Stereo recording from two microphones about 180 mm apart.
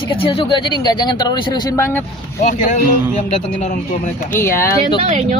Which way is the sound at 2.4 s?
45° left (ahead or behind).